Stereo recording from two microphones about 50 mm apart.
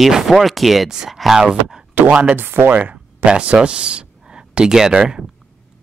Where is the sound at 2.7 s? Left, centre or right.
Right.